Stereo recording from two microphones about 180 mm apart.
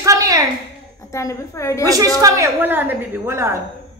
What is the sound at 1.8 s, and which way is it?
A woman's voice, 20° right (ahead or behind).